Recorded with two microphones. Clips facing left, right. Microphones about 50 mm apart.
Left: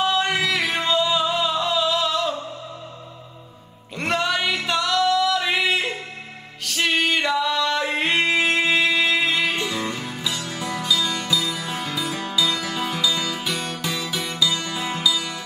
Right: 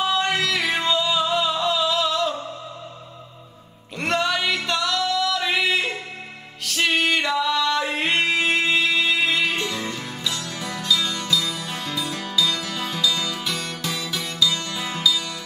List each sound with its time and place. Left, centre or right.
0.0 s music: centre
4.0 s singing: centre
6.6 s music: centre; by 15.3 s left